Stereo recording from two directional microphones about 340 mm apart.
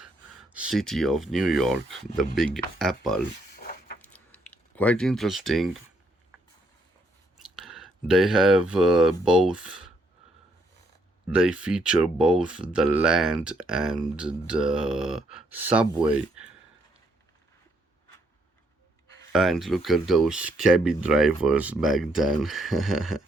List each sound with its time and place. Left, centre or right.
0.5 s speech: centre
3.5 s a sound: left
4.0 s a sound: centre
7.5 s speech: centre
11.3 s speech: centre
19.3 s speech: centre